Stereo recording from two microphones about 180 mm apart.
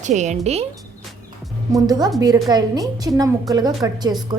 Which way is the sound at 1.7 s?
20° right (ahead or behind).